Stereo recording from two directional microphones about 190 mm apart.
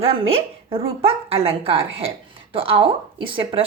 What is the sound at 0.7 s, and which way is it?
Speech, 30° right (ahead or behind).